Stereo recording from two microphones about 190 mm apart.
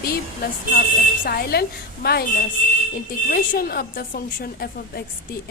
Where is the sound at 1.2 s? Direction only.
50° left (ahead or behind).